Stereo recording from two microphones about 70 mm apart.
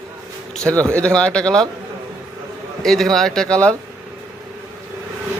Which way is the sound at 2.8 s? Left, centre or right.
Centre.